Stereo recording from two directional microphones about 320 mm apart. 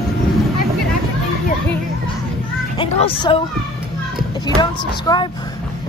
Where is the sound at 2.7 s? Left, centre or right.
Centre.